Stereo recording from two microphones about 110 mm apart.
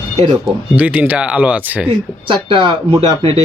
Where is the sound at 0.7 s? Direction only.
15° right (ahead or behind).